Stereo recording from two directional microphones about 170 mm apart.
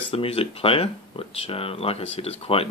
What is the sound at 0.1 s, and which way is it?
Speech, 35° left (ahead or behind).